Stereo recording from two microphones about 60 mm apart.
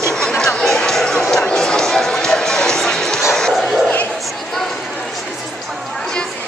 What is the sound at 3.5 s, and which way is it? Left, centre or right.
Bow-wow, centre.